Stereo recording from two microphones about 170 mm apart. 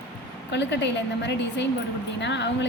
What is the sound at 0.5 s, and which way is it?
A woman's voice, 90° left.